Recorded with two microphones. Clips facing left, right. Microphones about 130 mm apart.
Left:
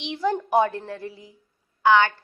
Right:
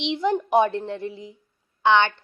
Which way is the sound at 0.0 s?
20° right (ahead or behind).